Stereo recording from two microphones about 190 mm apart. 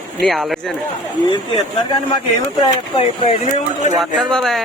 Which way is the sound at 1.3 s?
25° left (ahead or behind).